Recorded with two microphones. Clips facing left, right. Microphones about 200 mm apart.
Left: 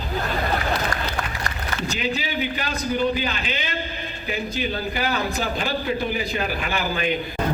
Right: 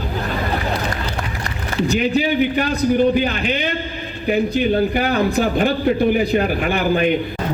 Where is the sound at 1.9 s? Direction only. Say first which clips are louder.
Right 10 dB; 55° right (ahead or behind).